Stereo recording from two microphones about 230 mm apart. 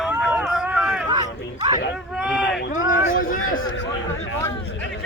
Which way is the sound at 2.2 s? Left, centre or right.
Centre.